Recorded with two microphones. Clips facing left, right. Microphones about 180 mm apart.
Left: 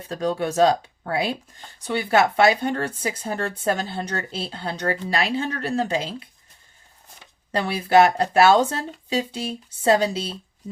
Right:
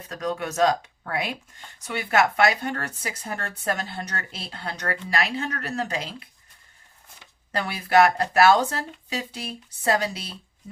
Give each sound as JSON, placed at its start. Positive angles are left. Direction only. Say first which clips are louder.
{"t": 0.1, "sound": "speech", "louder": "left 5 dB", "side_deg": 30}
{"t": 7.5, "sound": "speech", "louder": "left 3 dB", "side_deg": 30}